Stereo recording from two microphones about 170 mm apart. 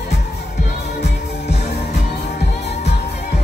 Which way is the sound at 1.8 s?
40° left (ahead or behind).